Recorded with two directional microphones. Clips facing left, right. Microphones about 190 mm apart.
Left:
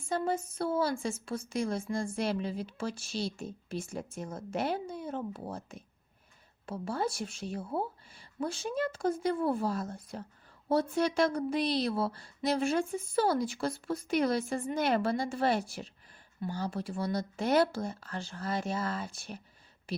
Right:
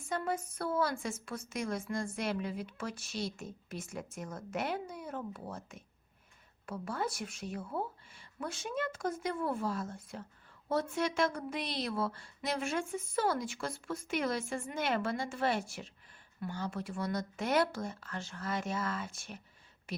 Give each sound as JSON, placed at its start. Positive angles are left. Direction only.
{"t": 0.1, "sound": "a woman's voice", "side_deg": 25}